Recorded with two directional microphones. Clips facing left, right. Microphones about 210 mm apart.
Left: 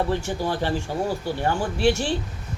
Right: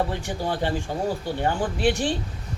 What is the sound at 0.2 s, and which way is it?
A man's voice, 15° right (ahead or behind).